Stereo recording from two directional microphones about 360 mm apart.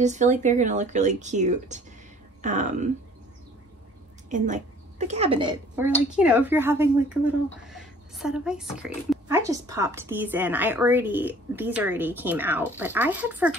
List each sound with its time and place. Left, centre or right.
0.0 s speech: centre
4.3 s a woman's voice: centre